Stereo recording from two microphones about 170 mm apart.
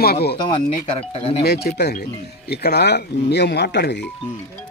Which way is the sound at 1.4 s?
70° left (ahead or behind).